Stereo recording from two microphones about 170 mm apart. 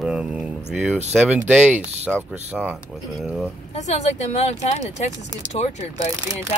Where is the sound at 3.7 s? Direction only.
40° left (ahead or behind).